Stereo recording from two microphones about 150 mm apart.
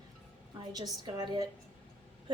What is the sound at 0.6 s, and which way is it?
Speech, 25° right (ahead or behind).